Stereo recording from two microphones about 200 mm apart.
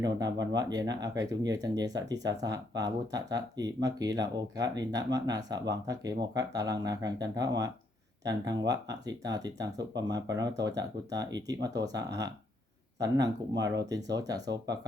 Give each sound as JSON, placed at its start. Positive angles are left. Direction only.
{"t": 0.0, "sound": "speech", "side_deg": -20}